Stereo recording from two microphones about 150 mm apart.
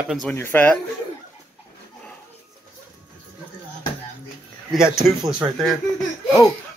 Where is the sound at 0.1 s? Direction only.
5° left (ahead or behind).